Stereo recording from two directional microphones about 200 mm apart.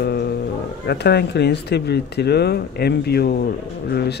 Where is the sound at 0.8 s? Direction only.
55° left (ahead or behind).